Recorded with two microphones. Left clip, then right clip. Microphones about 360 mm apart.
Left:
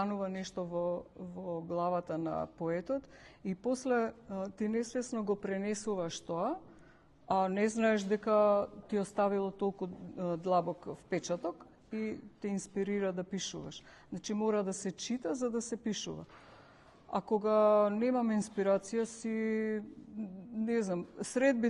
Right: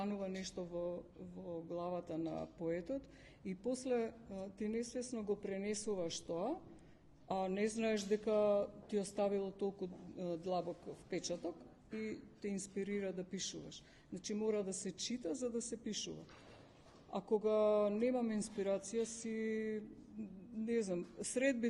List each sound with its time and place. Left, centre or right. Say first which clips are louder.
0.0 s a man's voice: left 7 dB; left